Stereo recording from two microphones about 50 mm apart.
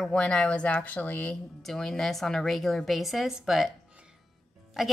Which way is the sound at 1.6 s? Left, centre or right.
Centre.